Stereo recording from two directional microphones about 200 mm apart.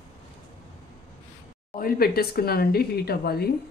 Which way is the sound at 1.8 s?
45° left (ahead or behind).